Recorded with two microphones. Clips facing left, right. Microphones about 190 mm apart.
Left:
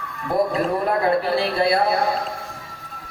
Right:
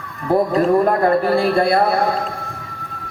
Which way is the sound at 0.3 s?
45° right (ahead or behind).